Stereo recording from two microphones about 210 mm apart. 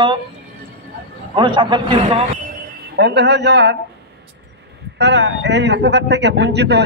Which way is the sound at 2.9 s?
55° right (ahead or behind).